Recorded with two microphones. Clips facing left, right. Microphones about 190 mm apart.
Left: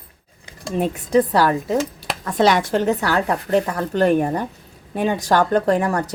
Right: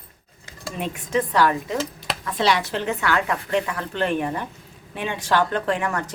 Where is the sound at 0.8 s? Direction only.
35° left (ahead or behind).